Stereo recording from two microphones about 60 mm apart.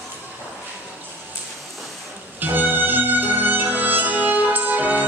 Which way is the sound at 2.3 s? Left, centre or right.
Right.